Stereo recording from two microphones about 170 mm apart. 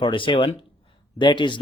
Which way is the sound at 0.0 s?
30° left (ahead or behind).